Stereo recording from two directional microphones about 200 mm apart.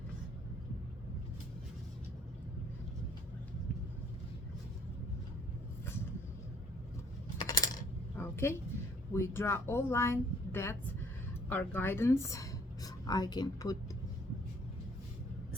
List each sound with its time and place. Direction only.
7.3 s coin: 20° left (ahead or behind)
8.2 s a sound: 10° left (ahead or behind)
9.1 s a woman's voice: 10° left (ahead or behind)